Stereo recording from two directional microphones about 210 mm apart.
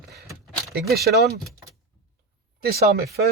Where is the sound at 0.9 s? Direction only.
50° right (ahead or behind).